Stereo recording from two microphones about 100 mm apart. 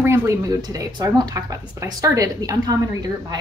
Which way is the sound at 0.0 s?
25° right (ahead or behind).